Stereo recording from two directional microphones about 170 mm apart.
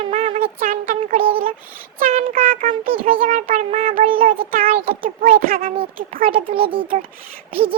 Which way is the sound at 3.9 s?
55° right (ahead or behind).